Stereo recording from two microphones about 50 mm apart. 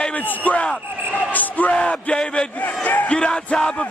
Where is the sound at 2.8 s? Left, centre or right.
Left.